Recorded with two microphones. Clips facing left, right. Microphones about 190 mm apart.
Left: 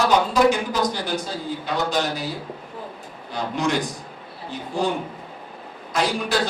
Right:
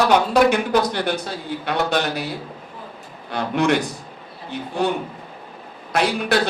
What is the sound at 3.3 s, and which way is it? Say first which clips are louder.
A man's voice: right 4 dB; 65° right (ahead or behind).